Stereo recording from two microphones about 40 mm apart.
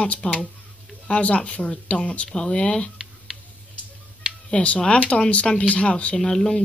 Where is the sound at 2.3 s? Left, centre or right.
Left.